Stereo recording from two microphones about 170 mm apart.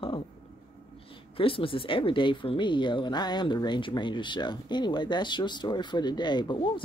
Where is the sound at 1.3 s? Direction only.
30° left (ahead or behind).